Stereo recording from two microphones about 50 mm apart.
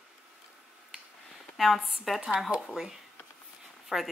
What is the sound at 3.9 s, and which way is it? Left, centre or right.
Speech, centre.